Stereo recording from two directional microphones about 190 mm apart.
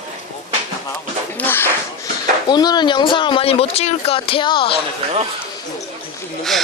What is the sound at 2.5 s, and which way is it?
Speech, 20° left (ahead or behind).